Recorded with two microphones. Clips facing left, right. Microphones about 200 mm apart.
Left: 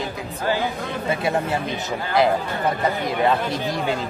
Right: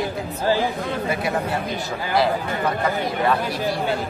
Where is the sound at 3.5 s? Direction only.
20° left (ahead or behind).